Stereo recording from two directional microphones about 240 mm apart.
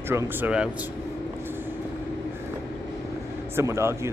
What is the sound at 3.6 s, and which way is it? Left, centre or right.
Speech, centre.